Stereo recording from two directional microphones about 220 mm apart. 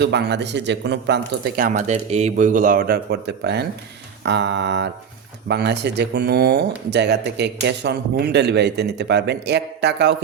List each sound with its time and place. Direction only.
0.0 s speech: 50° right (ahead or behind)